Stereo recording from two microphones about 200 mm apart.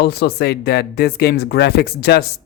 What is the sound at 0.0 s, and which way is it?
Speech, 55° left (ahead or behind).